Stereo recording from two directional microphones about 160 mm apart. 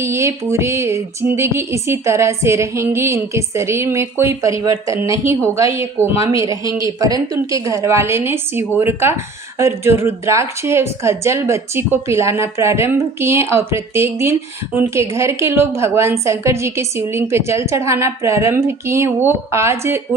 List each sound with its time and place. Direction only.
0.0 s speech: 20° right (ahead or behind)